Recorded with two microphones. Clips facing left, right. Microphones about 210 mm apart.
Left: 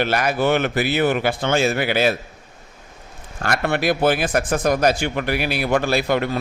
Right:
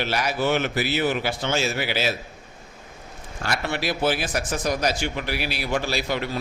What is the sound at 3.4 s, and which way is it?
Speech, 55° left (ahead or behind).